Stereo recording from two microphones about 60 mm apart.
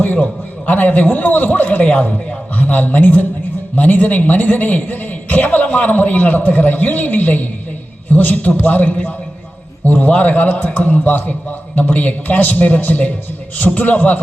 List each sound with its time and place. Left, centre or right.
0.0 s a man's voice: left